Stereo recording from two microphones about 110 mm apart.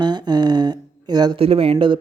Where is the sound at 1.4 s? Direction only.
60° right (ahead or behind).